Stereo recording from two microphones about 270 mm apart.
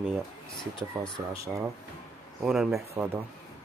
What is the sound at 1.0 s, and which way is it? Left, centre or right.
Speech, centre.